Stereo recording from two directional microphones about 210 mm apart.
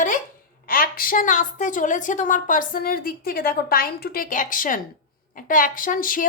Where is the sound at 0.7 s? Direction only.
45° left (ahead or behind).